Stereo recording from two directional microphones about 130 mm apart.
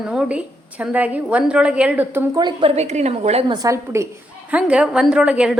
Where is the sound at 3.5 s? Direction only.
25° right (ahead or behind).